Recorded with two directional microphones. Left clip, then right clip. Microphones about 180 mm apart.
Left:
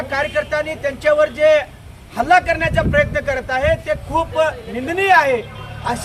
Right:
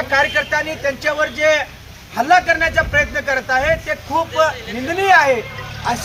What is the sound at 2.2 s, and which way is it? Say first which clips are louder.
A man's voice: right 1 dB; 30° left (ahead or behind).